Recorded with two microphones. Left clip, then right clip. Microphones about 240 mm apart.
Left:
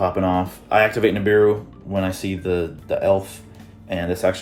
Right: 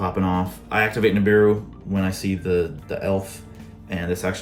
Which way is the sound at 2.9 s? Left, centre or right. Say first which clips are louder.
Left 6 dB; left.